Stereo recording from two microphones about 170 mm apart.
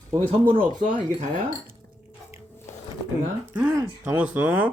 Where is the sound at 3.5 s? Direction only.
10° right (ahead or behind).